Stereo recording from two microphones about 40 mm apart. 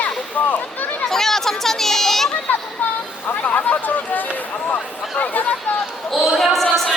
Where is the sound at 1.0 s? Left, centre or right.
Centre.